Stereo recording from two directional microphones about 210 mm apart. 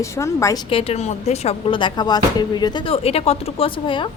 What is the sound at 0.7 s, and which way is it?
Speech, 25° left (ahead or behind).